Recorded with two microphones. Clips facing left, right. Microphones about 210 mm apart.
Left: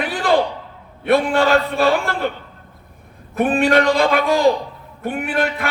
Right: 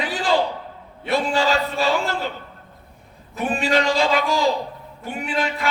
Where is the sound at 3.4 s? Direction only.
55° left (ahead or behind).